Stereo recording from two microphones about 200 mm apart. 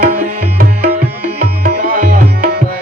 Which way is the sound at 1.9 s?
45° right (ahead or behind).